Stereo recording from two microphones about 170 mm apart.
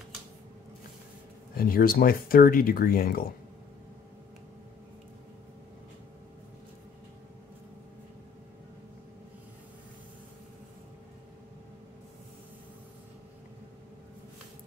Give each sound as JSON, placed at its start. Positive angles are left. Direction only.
{"t": 1.6, "sound": "speech", "side_deg": 60}